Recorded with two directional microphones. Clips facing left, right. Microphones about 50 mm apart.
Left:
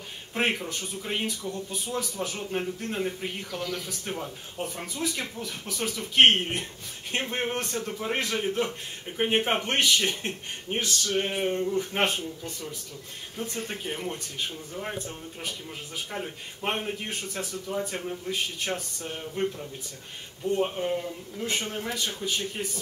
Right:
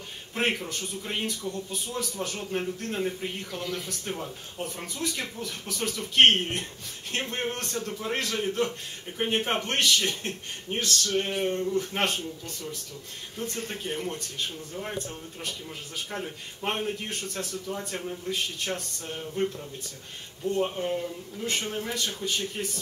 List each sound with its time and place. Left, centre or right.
0.3 s speech: centre
4.0 s speech: centre
16.1 s speech: centre